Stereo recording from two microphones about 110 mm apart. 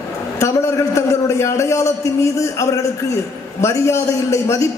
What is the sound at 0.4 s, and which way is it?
A man's voice, 25° left (ahead or behind).